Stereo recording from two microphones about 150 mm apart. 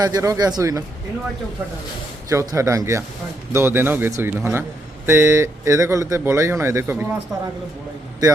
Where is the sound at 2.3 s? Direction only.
20° right (ahead or behind).